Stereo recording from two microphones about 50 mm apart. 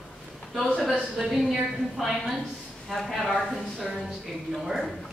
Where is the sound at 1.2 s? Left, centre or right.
Centre.